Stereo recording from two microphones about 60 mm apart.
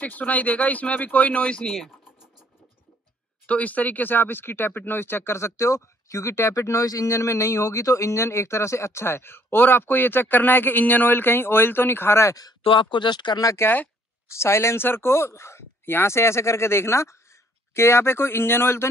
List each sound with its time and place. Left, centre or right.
0.0 s speech: left; by 1.9 s centre
3.4 s speech: left
13.6 s speech: left